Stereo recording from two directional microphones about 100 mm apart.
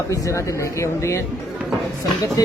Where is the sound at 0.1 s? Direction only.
30° left (ahead or behind).